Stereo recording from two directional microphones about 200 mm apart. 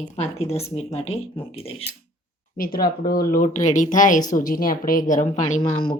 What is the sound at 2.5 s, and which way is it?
Speech, 50° left (ahead or behind).